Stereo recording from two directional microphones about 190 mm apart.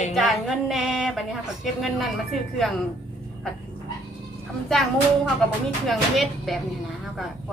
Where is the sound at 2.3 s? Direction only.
Centre (ahead or behind).